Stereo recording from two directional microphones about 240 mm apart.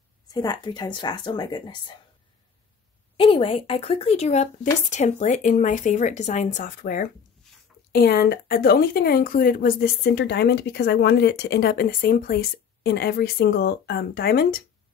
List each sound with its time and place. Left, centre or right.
0.3 s speech: centre
3.2 s a woman's voice: left